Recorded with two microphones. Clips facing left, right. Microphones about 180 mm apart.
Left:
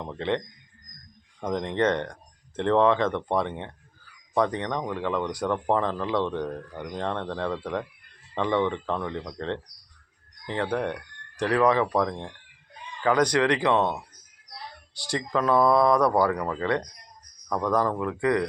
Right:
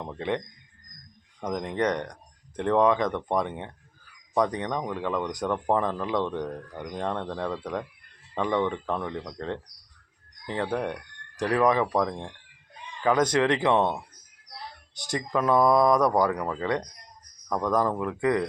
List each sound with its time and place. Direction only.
0.0 s speech: 15° right (ahead or behind)
1.5 s speech: 10° right (ahead or behind)
6.4 s speech: centre (ahead or behind)
6.9 s speech: 10° right (ahead or behind)
10.8 s speech: 15° right (ahead or behind)
14.9 s speech: 20° right (ahead or behind)